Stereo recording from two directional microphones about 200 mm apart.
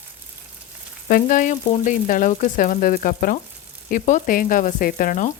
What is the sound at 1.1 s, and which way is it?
Frying, 40° left (ahead or behind).